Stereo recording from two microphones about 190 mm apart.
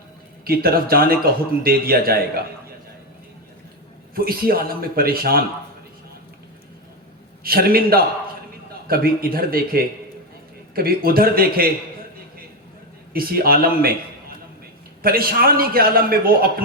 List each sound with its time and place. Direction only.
0.4 s a man's voice: 50° right (ahead or behind)
4.1 s a man's voice: 50° right (ahead or behind)
7.4 s a man's voice: 50° right (ahead or behind)
13.1 s a man's voice: 50° right (ahead or behind)
15.0 s a man's voice: 50° right (ahead or behind)